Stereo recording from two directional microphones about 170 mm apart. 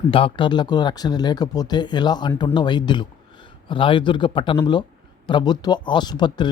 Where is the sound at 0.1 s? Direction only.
30° left (ahead or behind).